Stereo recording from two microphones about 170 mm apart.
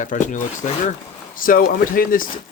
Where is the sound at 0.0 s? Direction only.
50° left (ahead or behind).